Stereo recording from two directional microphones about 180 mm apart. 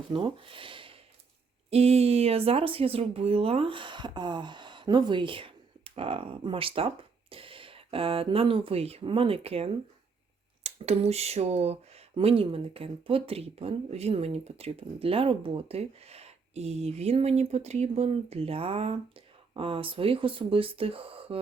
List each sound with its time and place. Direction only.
0.1 s speech: 30° right (ahead or behind)